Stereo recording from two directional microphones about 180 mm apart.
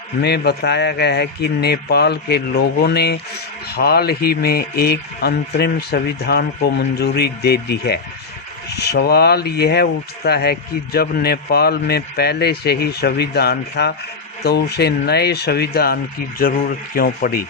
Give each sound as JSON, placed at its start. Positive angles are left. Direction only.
{"t": 0.2, "sound": "speech", "side_deg": 65}